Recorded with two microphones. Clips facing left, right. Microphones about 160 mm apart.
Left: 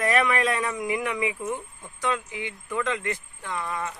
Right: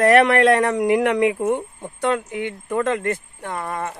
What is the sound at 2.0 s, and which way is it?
Speech, 55° right (ahead or behind).